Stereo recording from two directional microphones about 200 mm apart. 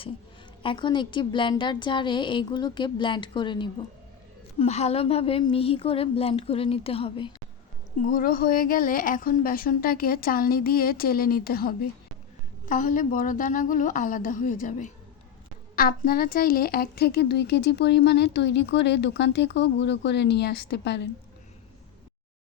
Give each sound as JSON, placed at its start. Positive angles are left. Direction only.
{"t": 0.6, "sound": "a woman's voice", "side_deg": 25}
{"t": 8.0, "sound": "a woman's voice", "side_deg": 45}